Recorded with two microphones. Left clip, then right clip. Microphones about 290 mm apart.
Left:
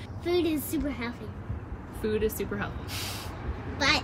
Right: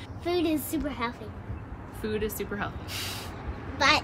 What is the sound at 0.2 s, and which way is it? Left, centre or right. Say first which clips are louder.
A woman's voice: even; centre.